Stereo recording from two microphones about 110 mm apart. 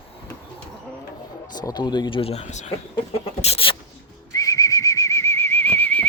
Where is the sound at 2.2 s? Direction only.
65° left (ahead or behind).